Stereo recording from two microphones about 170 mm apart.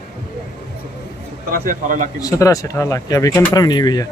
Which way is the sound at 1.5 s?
50° right (ahead or behind).